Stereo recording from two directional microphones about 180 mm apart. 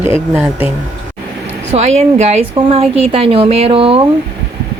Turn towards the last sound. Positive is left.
turn(degrees=-30)  # may be behind; listen again after turning